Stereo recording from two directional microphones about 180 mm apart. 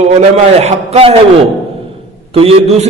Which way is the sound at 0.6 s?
35° right (ahead or behind).